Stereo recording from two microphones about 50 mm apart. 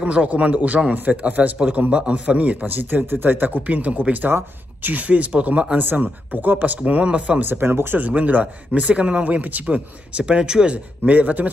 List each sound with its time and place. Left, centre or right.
0.0 s a man's voice: right
4.3 s speech: right
4.9 s speech: right
7.4 s speech: right
8.0 s speech: right
10.2 s speech: centre
11.1 s a man's voice: right